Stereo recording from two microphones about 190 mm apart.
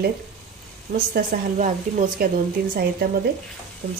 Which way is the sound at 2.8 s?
55° right (ahead or behind).